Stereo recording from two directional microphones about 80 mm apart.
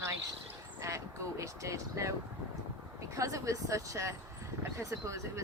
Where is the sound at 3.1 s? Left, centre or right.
Right.